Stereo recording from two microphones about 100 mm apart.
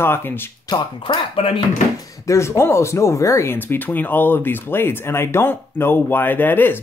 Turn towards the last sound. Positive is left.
turn(degrees=20)  # may be behind; listen again after turning